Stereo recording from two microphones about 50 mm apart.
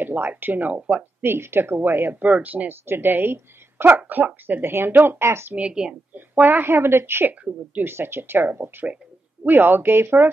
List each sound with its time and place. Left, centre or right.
0.0 s speech: right
0.7 s speech: right
1.2 s speech: right
2.2 s speech: right
2.9 s speech: right
5.2 s speech: right
5.7 s a woman's voice: centre
6.1 s speech: right